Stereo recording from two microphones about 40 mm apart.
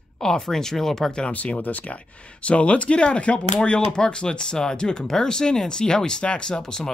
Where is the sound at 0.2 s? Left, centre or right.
Centre.